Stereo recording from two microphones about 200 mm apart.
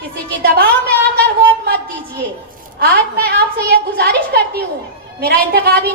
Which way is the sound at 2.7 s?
50° right (ahead or behind).